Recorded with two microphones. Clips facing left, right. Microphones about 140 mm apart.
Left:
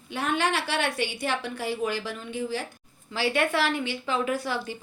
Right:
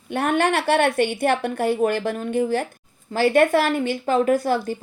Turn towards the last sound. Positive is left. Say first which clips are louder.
# right 9 dB
turn(degrees=-45)  # may be behind; listen again after turning